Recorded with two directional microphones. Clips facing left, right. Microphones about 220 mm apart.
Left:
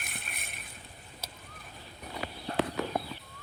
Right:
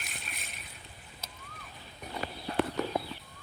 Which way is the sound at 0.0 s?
55° left (ahead or behind).